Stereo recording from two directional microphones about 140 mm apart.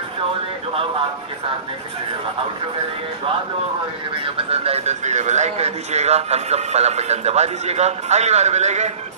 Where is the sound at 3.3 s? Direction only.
40° right (ahead or behind).